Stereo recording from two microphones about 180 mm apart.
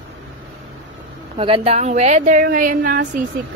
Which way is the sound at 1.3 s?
30° right (ahead or behind).